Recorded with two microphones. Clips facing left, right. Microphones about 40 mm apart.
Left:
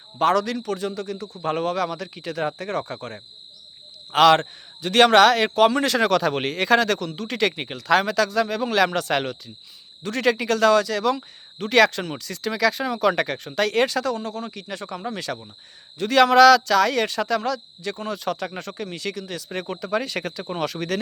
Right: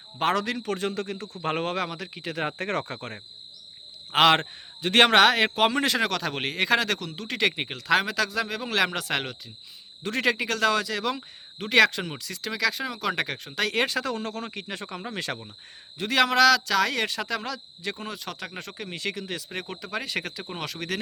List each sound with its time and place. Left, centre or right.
0.2 s a man's voice: right
1.9 s speech: centre
2.6 s a man's voice: right
6.0 s speech: centre
10.0 s speech: right
10.2 s speech: centre
13.8 s speech: right
14.2 s a man's voice: right
16.0 s speech: centre
18.2 s speech: centre
18.9 s speech: centre
19.5 s speech: centre